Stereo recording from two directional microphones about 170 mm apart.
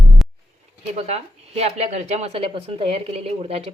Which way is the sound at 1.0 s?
40° right (ahead or behind).